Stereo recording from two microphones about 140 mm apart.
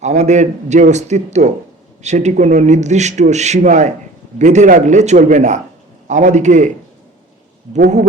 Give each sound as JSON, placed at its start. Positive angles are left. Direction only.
{"t": 0.0, "sound": "speech", "side_deg": -55}